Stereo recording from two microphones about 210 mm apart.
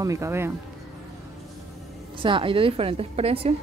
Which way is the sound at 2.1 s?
25° right (ahead or behind).